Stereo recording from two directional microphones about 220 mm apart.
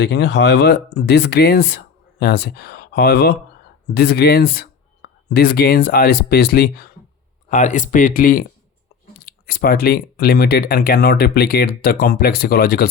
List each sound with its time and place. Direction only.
0.0 s speech: 50° left (ahead or behind)